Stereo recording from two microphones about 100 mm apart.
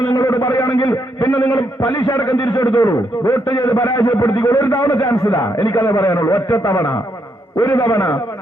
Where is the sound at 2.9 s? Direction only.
35° left (ahead or behind).